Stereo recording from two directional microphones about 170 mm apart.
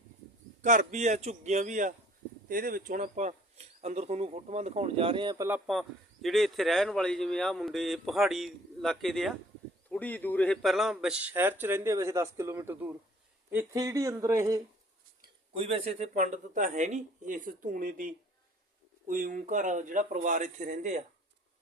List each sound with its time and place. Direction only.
0.6 s speech: 45° right (ahead or behind); by 5.5 s 25° right (ahead or behind)
5.5 s speech: 5° right (ahead or behind)
15.5 s speech: 35° right (ahead or behind)